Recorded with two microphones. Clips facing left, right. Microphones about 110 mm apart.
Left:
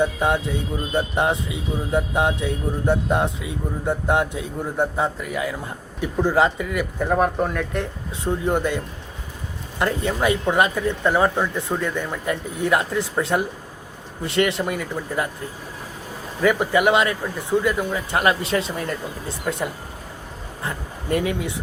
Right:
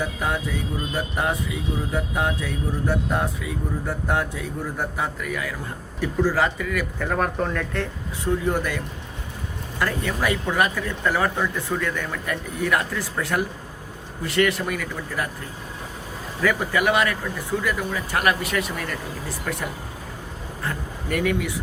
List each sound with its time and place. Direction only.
0.0 s speech: 25° left (ahead or behind)
16.4 s speech: 20° left (ahead or behind)
20.7 s speech: 25° left (ahead or behind)